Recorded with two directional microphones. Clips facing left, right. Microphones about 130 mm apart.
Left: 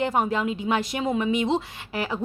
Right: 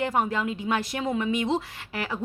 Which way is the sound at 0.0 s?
25° left (ahead or behind).